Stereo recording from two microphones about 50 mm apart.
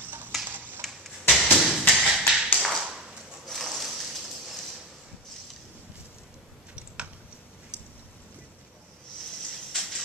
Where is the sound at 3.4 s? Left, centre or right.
Centre.